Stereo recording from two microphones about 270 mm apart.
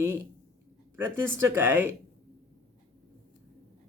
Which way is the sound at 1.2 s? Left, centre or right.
Centre.